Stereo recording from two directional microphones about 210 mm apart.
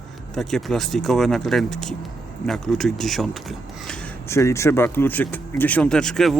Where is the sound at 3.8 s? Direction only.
15° left (ahead or behind).